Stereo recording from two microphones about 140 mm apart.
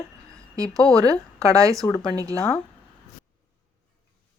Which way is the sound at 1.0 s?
25° right (ahead or behind).